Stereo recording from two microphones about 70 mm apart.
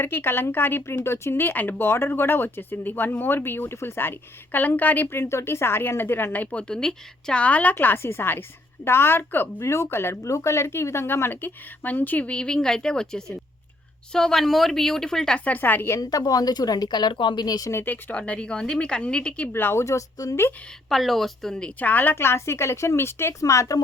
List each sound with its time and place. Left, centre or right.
0.0 s a woman's voice: left; by 15.4 s centre
15.4 s a woman's voice: left
16.0 s speech: left
17.8 s a woman's voice: left
19.5 s speech: left
19.8 s speech: left
20.9 s a woman's voice: centre
21.8 s speech: left
23.4 s speech: left